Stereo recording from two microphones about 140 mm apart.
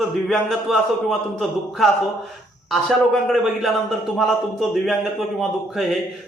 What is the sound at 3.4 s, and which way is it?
A man's voice, centre (ahead or behind).